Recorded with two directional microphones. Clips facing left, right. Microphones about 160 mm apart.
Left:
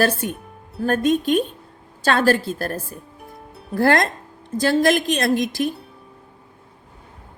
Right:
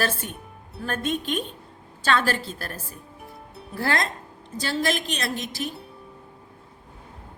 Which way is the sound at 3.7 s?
50° left (ahead or behind).